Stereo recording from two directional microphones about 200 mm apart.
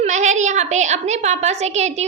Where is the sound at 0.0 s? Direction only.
35° right (ahead or behind).